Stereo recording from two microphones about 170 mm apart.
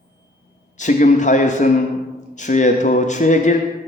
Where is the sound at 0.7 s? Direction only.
45° left (ahead or behind).